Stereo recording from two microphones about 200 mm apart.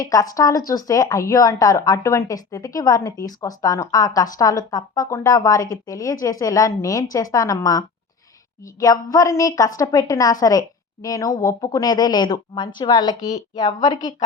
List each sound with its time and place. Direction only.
0.0 s a woman's voice: 20° left (ahead or behind)